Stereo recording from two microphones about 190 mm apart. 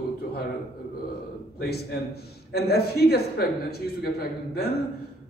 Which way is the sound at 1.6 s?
55° left (ahead or behind).